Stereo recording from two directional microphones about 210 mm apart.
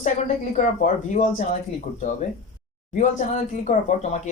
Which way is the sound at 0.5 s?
35° left (ahead or behind).